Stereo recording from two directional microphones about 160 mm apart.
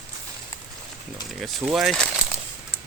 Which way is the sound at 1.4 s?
Centre (ahead or behind).